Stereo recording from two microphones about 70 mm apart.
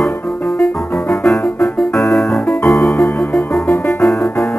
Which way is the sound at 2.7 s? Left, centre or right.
Left.